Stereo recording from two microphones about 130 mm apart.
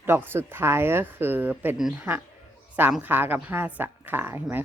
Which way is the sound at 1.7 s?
5° right (ahead or behind).